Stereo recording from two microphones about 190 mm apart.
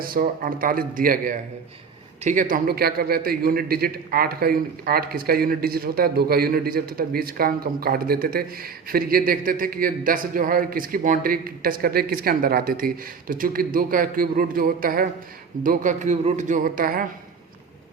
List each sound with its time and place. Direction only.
0.0 s a man's voice: 50° right (ahead or behind)